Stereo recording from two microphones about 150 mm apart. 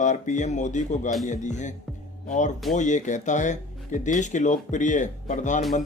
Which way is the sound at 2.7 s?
55° left (ahead or behind).